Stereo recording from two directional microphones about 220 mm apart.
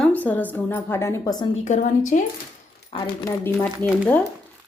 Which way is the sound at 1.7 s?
35° left (ahead or behind).